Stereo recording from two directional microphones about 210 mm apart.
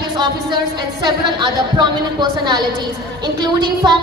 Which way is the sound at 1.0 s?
20° right (ahead or behind).